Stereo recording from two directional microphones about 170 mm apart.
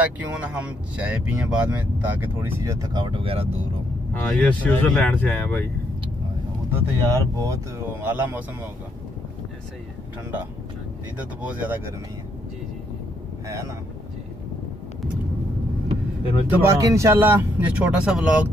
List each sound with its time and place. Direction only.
0.0 s speech: 10° right (ahead or behind); by 3.5 s 35° right (ahead or behind)
4.1 s speech: 10° left (ahead or behind)
6.7 s speech: 15° right (ahead or behind)
11.1 s speech: 10° right (ahead or behind)
13.5 s speech: 20° right (ahead or behind)
16.4 s speech: 20° right (ahead or behind)